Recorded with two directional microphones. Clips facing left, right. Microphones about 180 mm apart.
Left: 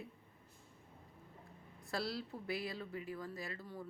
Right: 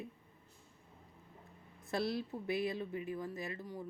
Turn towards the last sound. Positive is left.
turn(degrees=-15)  # may be behind; listen again after turning